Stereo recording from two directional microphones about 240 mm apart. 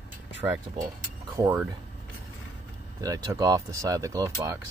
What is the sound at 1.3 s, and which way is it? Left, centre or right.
Speech, centre.